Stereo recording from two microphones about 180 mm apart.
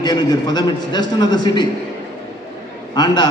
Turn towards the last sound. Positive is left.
turn(degrees=25)  # may be behind; listen again after turning